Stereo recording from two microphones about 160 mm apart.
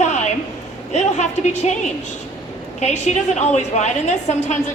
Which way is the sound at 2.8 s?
45° left (ahead or behind).